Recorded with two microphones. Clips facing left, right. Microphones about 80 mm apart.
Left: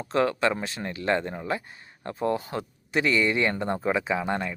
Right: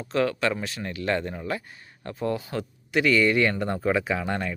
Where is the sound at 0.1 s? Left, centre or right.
Left.